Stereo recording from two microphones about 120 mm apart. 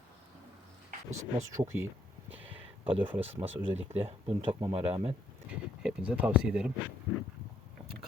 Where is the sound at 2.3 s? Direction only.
15° right (ahead or behind).